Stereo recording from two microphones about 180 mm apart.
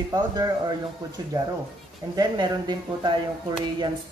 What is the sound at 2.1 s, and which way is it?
Speech, 25° right (ahead or behind).